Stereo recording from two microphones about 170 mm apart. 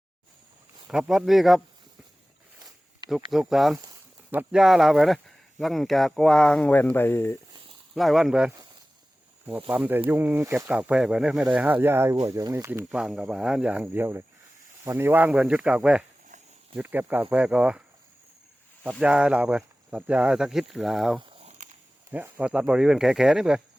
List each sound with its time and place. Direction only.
0.9 s speech: 5° right (ahead or behind)
3.3 s speech: centre (ahead or behind)
7.9 s speech: centre (ahead or behind)
9.6 s speech: 10° right (ahead or behind)
12.9 s speech: 5° right (ahead or behind)
21.2 s a sound: 35° right (ahead or behind)
22.1 s speech: 10° right (ahead or behind)